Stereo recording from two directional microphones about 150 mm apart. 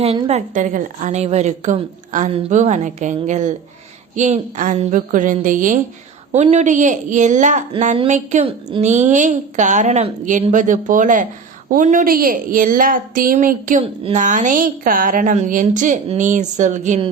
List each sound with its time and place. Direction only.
0.0 s a woman's voice: 40° right (ahead or behind); by 5.8 s 60° right (ahead or behind)
6.3 s a woman's voice: 50° right (ahead or behind)